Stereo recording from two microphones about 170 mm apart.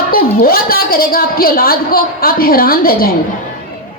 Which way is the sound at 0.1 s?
60° left (ahead or behind).